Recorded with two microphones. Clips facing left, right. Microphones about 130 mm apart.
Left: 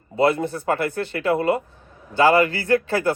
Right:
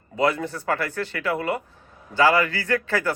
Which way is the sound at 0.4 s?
15° left (ahead or behind).